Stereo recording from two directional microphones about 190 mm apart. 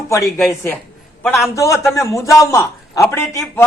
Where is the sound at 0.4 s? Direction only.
10° left (ahead or behind).